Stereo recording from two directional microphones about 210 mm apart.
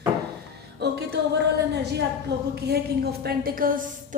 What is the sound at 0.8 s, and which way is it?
Speech, 50° right (ahead or behind).